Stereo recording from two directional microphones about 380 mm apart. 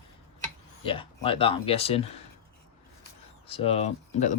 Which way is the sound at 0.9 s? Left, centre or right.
Centre.